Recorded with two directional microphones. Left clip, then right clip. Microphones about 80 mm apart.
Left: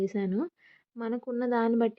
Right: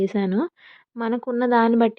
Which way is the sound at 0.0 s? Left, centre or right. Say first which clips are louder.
Right 8 dB; right.